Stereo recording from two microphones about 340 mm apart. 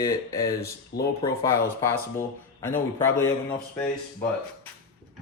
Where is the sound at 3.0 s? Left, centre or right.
Centre.